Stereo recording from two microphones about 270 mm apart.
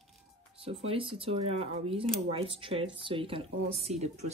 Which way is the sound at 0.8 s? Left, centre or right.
Centre.